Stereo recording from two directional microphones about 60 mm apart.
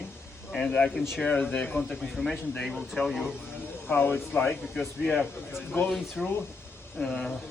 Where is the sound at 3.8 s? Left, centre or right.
Left.